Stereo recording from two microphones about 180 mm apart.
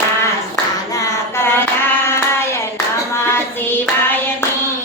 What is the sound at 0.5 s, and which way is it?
Clapping, 15° left (ahead or behind).